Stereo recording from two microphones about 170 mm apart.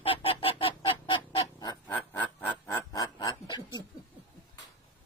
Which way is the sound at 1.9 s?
10° left (ahead or behind).